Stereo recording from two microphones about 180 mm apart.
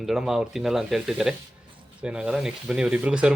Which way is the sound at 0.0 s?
Centre (ahead or behind).